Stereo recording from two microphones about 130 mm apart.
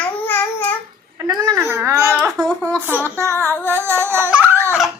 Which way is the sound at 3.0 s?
20° right (ahead or behind).